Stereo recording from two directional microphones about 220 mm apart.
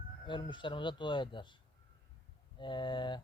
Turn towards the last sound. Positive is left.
turn(degrees=20)  # may be behind; listen again after turning